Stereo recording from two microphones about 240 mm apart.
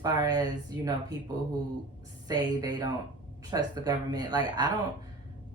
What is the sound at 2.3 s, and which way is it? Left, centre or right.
Speech, centre.